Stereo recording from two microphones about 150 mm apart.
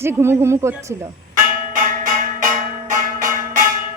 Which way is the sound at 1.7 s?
60° right (ahead or behind).